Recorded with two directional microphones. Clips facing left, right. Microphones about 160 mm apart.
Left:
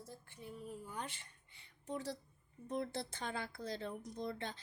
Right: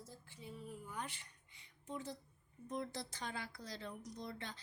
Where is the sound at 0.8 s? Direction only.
30° left (ahead or behind).